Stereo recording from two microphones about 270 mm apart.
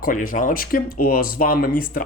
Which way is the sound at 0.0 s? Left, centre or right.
Left.